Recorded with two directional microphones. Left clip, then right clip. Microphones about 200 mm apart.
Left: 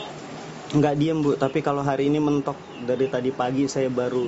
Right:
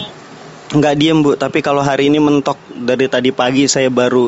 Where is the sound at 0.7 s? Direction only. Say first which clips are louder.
Right 10 dB; 30° right (ahead or behind).